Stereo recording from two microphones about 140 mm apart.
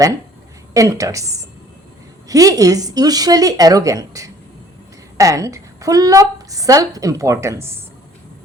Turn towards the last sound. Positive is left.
turn(degrees=-20)  # may be behind; listen again after turning